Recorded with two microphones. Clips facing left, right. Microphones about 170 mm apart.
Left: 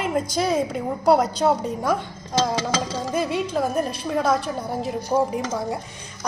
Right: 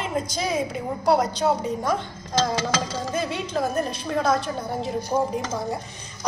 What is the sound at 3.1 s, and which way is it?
A woman's voice, 5° left (ahead or behind).